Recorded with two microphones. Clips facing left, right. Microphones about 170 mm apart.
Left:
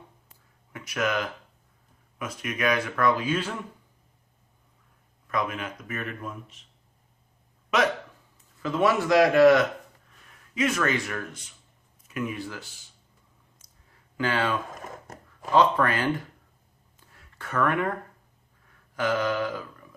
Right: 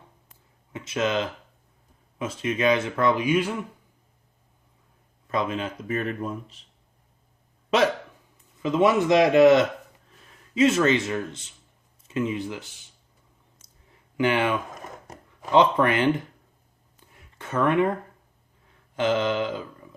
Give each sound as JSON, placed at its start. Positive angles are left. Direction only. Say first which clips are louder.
{"t": 0.7, "sound": "speech", "louder": "right 3 dB", "side_deg": -25}
{"t": 5.3, "sound": "speech", "louder": "right 3 dB", "side_deg": -25}
{"t": 7.7, "sound": "speech", "louder": "right 3 dB", "side_deg": -30}
{"t": 8.6, "sound": "speech", "louder": "right 3 dB", "side_deg": -20}
{"t": 13.6, "sound": "clicking", "louder": "right 3 dB", "side_deg": -20}
{"t": 14.8, "sound": "a sound", "louder": "even", "side_deg": 0}
{"t": 15.5, "sound": "speech", "louder": "right 2 dB", "side_deg": -20}
{"t": 17.1, "sound": "a sound", "louder": "right 3 dB", "side_deg": -20}
{"t": 18.9, "sound": "a sound", "louder": "right 3 dB", "side_deg": -25}